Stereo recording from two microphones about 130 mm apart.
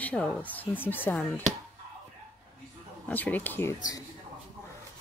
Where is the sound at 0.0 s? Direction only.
10° left (ahead or behind).